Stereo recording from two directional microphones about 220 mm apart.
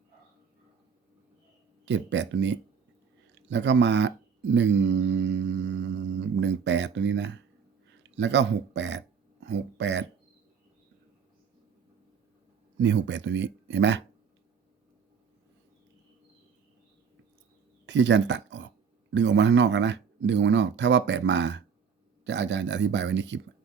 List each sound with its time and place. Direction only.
1.8 s speech: 55° right (ahead or behind)
12.8 s speech: 55° right (ahead or behind)
17.8 s speech: 55° right (ahead or behind)